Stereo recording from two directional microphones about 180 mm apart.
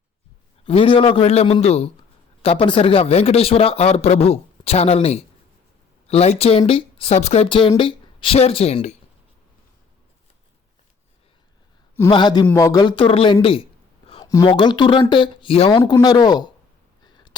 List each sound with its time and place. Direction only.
0.6 s speech: 30° left (ahead or behind)
12.1 s speech: 25° left (ahead or behind)
15.8 s speech: 20° left (ahead or behind)
17.1 s a sound: 25° left (ahead or behind)